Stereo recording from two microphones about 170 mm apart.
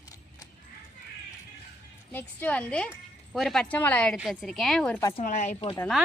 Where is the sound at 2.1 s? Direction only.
10° left (ahead or behind).